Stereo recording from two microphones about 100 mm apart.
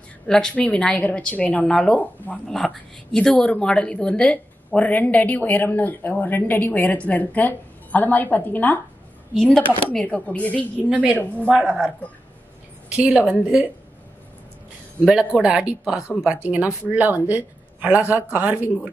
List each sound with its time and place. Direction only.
0.3 s speech: 10° left (ahead or behind)
2.4 s speech: 5° left (ahead or behind)
9.3 s speech: 5° left (ahead or behind)
9.6 s speech: 15° left (ahead or behind)
10.9 s speech: 15° right (ahead or behind)
12.9 s speech: 15° right (ahead or behind)
15.4 s a woman's voice: 10° right (ahead or behind)